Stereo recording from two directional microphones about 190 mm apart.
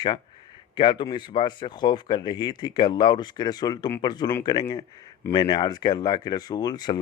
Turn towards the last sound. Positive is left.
turn(degrees=20)  # may be behind; listen again after turning